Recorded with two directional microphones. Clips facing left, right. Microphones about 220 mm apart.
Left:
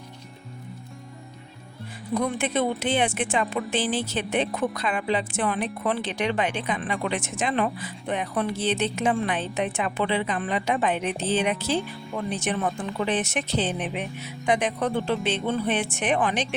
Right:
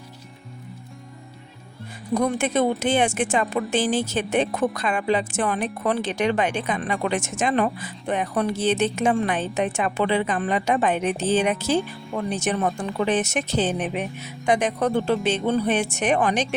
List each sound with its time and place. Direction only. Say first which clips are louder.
2.1 s speech: right 3 dB; 45° right (ahead or behind)